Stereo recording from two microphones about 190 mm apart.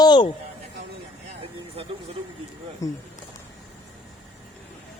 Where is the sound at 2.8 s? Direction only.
15° left (ahead or behind).